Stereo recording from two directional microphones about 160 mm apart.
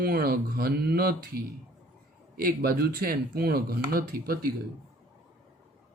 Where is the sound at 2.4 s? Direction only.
70° right (ahead or behind).